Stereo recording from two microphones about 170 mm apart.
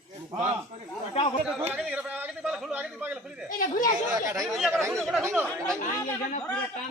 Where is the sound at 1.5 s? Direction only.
5° right (ahead or behind).